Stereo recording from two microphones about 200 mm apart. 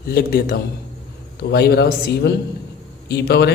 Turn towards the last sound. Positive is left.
turn(degrees=55)  # may be behind; listen again after turning